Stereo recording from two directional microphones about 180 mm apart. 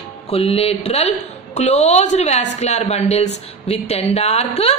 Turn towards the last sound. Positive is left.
turn(degrees=35)  # may be behind; listen again after turning